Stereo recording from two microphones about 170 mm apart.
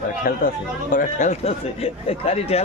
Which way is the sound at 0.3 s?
55° left (ahead or behind).